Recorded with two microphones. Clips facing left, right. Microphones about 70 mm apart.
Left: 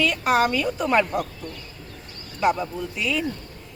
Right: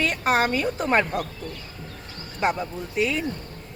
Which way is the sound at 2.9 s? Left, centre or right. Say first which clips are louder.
Right 3 dB; right.